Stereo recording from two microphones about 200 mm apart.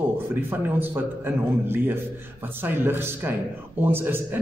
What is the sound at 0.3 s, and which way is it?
A man's voice, 10° right (ahead or behind).